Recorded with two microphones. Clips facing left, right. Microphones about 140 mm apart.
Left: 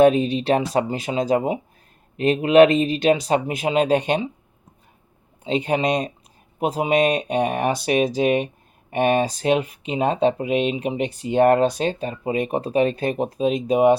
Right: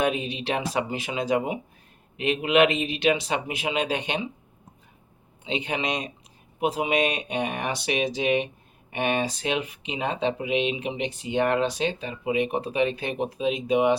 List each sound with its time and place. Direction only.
0.0 s speech: 40° left (ahead or behind)
5.4 s speech: 40° left (ahead or behind)